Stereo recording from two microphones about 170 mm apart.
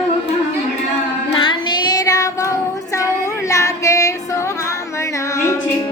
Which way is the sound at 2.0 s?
20° left (ahead or behind).